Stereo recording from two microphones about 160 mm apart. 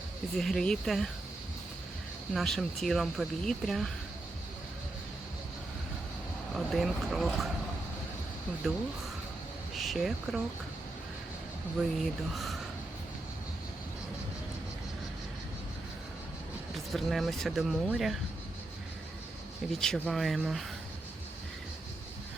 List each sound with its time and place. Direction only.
0.3 s speech: 5° left (ahead or behind)
2.3 s speech: centre (ahead or behind)
6.5 s speech: centre (ahead or behind)
9.7 s speech: centre (ahead or behind)
11.8 s speech: centre (ahead or behind)
16.7 s speech: centre (ahead or behind)
19.8 s speech: centre (ahead or behind)